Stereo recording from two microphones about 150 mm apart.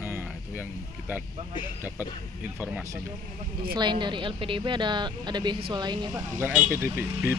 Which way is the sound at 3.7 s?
30° right (ahead or behind).